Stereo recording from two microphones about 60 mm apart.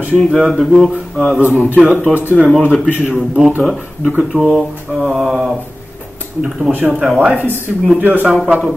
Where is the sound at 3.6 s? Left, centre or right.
Centre.